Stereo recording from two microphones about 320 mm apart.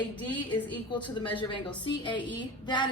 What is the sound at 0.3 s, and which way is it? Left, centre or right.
A woman's voice, centre.